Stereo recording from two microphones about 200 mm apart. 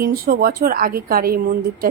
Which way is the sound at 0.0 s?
45° right (ahead or behind).